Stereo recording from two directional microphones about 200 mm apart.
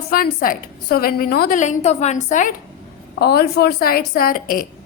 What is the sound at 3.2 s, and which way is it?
A woman's voice, 55° left (ahead or behind).